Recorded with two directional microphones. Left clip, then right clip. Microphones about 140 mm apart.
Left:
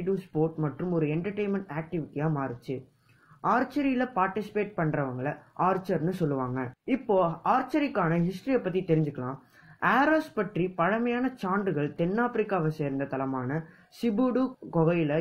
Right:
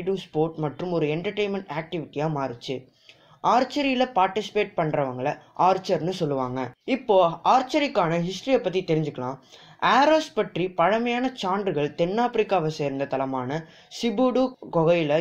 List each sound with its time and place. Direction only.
0.1 s speech: 40° right (ahead or behind)
3.3 s speech: 25° right (ahead or behind)
5.8 s speech: 25° right (ahead or behind); by 7.9 s 45° right (ahead or behind)
7.9 s speech: 30° right (ahead or behind)
10.3 s speech: 40° right (ahead or behind); by 13.7 s 25° right (ahead or behind)
14.0 s speech: 40° right (ahead or behind)